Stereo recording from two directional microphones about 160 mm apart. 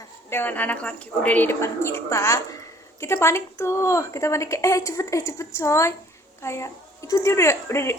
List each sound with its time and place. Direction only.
0.3 s a woman's voice: 10° left (ahead or behind)